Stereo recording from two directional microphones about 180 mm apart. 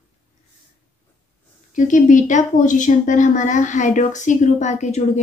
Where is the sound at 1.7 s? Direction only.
45° left (ahead or behind).